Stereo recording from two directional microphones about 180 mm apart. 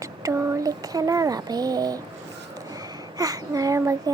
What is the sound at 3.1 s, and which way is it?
Speech, 20° right (ahead or behind).